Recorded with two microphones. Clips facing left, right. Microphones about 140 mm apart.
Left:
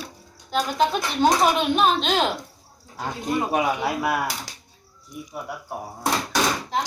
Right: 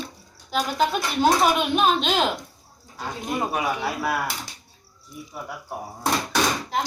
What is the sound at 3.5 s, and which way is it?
Speech, 15° left (ahead or behind).